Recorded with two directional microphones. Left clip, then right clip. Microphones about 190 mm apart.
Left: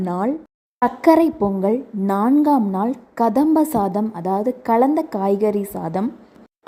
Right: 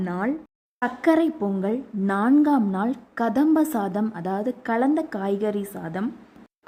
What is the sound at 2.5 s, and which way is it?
Speech, 10° right (ahead or behind).